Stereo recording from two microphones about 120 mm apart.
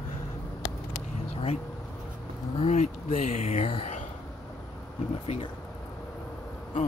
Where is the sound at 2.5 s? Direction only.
65° left (ahead or behind); by 3.7 s 85° left.